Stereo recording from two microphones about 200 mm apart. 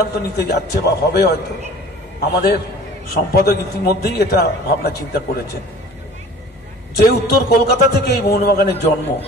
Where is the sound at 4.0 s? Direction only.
50° left (ahead or behind).